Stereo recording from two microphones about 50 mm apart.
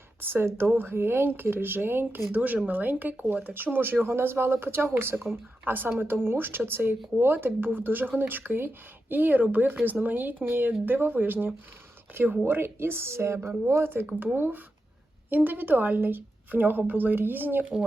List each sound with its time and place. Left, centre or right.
0.2 s speech: right
2.3 s speech: right
13.7 s speech: right
14.3 s speech: right